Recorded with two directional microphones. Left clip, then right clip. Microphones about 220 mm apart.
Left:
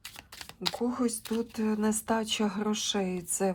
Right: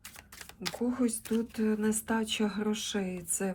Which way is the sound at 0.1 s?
5° left (ahead or behind).